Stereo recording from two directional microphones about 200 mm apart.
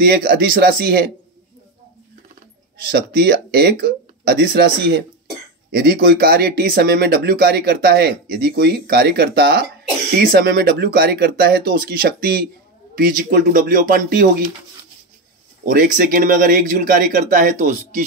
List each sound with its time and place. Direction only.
0.0 s speech: 45° right (ahead or behind)
2.9 s speech: 50° right (ahead or behind)
15.6 s speech: 40° right (ahead or behind)